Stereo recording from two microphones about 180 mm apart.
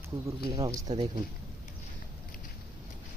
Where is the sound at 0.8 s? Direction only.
40° right (ahead or behind).